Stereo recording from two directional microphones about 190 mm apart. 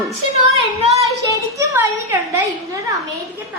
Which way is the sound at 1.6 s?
15° right (ahead or behind).